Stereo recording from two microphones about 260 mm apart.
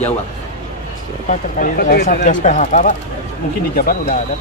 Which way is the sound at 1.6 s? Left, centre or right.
Left.